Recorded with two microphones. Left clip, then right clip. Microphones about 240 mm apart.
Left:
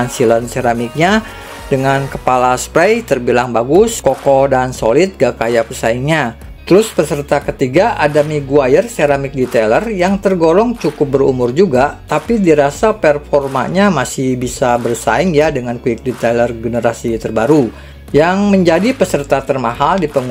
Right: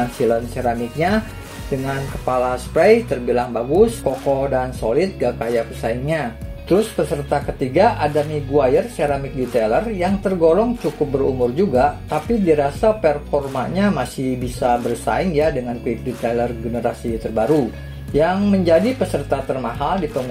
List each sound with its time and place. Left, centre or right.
0.0 s speech: left
2.2 s speech: left